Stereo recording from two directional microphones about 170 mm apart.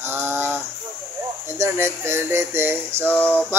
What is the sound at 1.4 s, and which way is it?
Speech, 15° right (ahead or behind).